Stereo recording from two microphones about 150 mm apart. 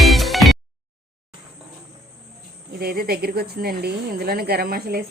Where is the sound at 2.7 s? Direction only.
90° right.